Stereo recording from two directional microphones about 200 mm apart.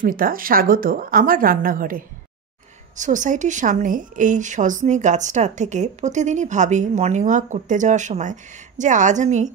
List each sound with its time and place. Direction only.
0.0 s a woman's voice: 45° right (ahead or behind)